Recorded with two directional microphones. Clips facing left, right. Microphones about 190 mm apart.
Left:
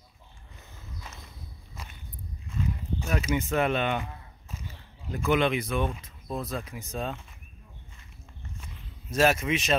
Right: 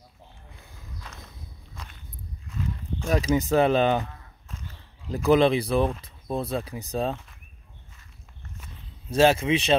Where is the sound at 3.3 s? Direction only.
35° right (ahead or behind).